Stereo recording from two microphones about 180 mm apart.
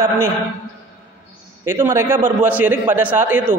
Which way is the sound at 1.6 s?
15° right (ahead or behind).